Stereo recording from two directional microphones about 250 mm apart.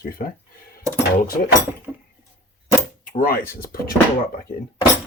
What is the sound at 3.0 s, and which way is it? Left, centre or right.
Speech, left.